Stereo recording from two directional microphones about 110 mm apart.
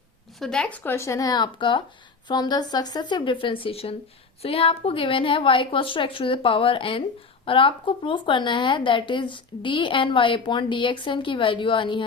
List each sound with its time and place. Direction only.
0.3 s speech: 5° left (ahead or behind)
0.9 s a woman's voice: 25° left (ahead or behind); by 12.0 s 45° left (ahead or behind)